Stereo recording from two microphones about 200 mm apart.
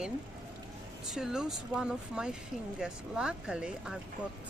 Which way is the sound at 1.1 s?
Centre (ahead or behind).